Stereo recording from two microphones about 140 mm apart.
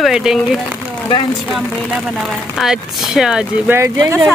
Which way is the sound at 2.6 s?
5° right (ahead or behind).